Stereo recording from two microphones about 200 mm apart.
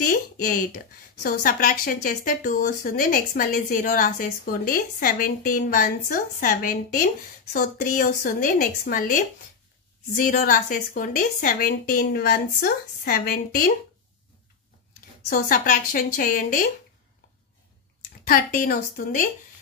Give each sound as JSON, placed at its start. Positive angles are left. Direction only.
{"t": 0.0, "sound": "a sound", "side_deg": 45}
{"t": 1.2, "sound": "speech", "side_deg": 45}
{"t": 15.2, "sound": "speech", "side_deg": 45}
{"t": 18.2, "sound": "speech", "side_deg": 45}